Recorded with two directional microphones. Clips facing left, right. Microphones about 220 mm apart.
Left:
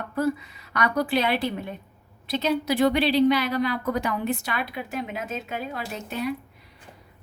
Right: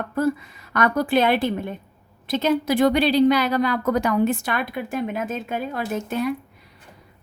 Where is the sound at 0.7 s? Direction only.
50° right (ahead or behind).